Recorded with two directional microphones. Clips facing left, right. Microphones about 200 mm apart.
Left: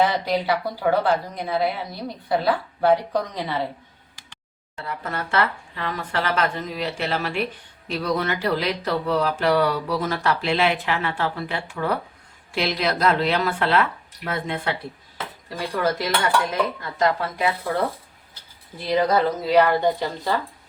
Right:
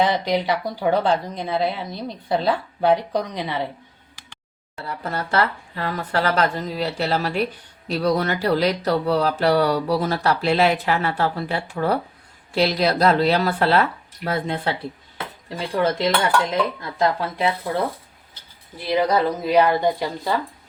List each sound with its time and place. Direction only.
0.0 s speech: 20° right (ahead or behind)
4.9 s speech: 35° right (ahead or behind)
18.9 s a woman's voice: 15° right (ahead or behind)